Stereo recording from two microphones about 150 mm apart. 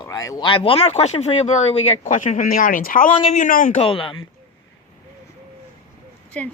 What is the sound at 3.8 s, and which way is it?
Speech, 35° left (ahead or behind).